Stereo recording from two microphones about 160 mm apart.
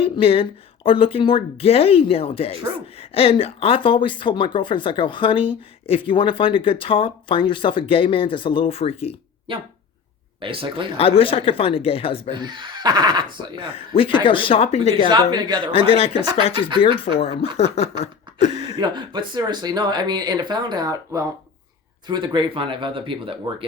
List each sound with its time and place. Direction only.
0.0 s speech: 35° left (ahead or behind)
9.5 s speech: 35° right (ahead or behind)
10.9 s speech: 35° left (ahead or behind)
12.3 s speech: 30° right (ahead or behind)
13.6 s speech: 35° left (ahead or behind)
15.0 s speech: 25° right (ahead or behind)
15.9 s speech: 35° left (ahead or behind)
17.2 s speech: 40° left (ahead or behind)
17.6 s a sound: 40° left (ahead or behind)
18.8 s speech: 30° right (ahead or behind)